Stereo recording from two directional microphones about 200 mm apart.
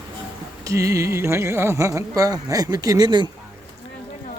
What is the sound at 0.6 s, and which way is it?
Speech, 15° right (ahead or behind).